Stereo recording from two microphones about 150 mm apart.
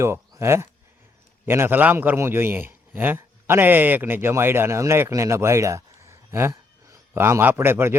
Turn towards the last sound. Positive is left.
turn(degrees=-15)  # may be behind; listen again after turning